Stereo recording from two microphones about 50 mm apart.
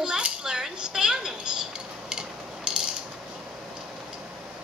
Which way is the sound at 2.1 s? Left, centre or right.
Centre.